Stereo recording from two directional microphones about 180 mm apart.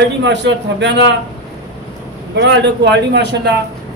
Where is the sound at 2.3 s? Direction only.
75° right (ahead or behind).